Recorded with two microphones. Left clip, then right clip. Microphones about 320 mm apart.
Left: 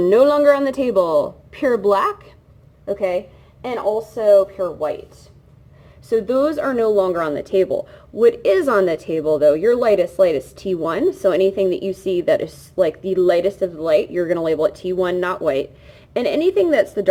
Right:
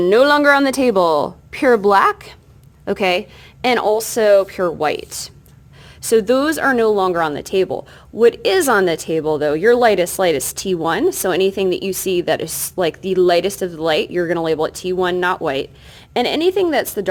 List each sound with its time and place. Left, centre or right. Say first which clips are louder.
0.0 s speech: right 1 dB; centre
2.8 s a woman's voice: right 3 dB; right
6.1 s speech: right 3 dB; right